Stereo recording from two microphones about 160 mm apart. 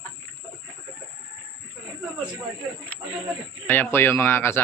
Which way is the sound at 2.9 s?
10° left (ahead or behind).